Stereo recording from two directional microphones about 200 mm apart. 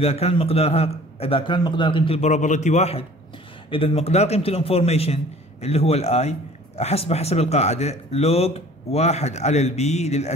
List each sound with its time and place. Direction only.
0.0 s a man's voice: 30° left (ahead or behind)